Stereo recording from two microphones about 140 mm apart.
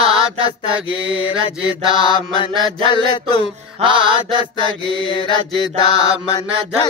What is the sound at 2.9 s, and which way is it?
Music, 35° left (ahead or behind).